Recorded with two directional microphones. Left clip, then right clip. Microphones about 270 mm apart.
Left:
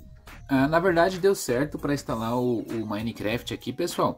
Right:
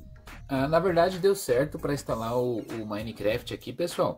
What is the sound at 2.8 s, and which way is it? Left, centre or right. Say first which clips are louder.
Speech: right 1 dB; left.